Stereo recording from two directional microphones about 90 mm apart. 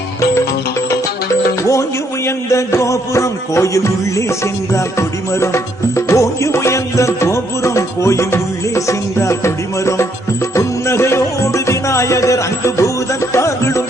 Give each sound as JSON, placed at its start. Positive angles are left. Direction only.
{"t": 2.2, "sound": "music", "side_deg": 35}